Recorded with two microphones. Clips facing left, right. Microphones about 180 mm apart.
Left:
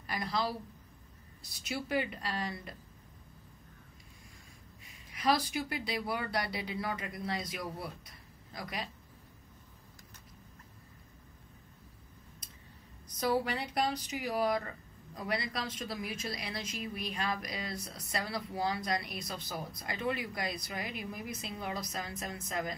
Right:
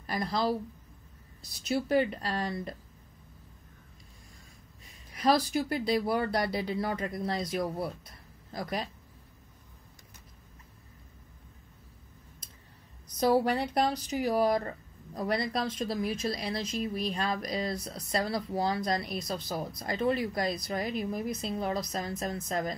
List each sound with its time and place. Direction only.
0.0 s speech: 40° right (ahead or behind)
1.6 s speech: 40° right (ahead or behind)
5.1 s speech: 40° right (ahead or behind)
13.2 s speech: 40° right (ahead or behind)